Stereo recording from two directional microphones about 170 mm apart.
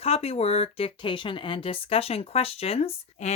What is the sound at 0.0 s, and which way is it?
Speech, 35° left (ahead or behind).